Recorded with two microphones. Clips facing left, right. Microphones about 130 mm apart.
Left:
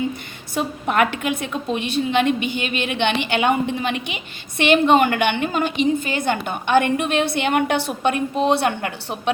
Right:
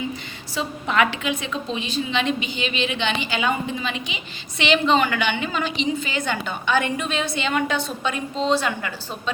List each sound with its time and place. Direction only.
0.5 s a woman's voice: 55° left (ahead or behind)